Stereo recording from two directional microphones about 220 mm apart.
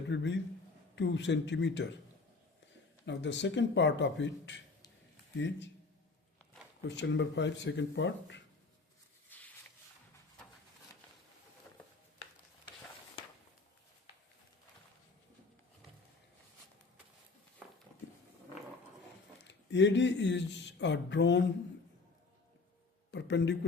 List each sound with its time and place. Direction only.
0.1 s speech: 55° left (ahead or behind)
3.1 s speech: 55° left (ahead or behind)
6.8 s speech: 55° left (ahead or behind)
9.3 s a sound: 10° left (ahead or behind)
19.5 s speech: 55° left (ahead or behind)
23.1 s speech: 55° left (ahead or behind)